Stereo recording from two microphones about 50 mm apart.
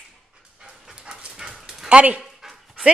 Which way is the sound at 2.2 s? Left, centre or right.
Centre.